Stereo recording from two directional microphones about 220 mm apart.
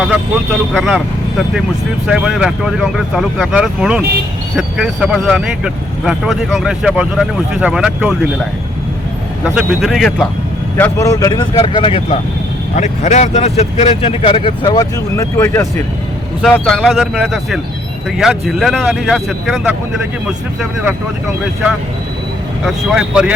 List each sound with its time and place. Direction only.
0.7 s speech: centre (ahead or behind)
9.4 s speech: centre (ahead or behind)
10.8 s speech: 10° left (ahead or behind)
16.4 s speech: centre (ahead or behind)
22.6 s speech: 5° right (ahead or behind)